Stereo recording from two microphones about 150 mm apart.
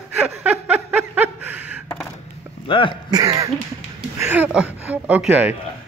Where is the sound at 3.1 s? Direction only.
25° right (ahead or behind).